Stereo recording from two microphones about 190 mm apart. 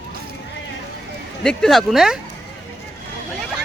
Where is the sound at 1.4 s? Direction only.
Centre (ahead or behind).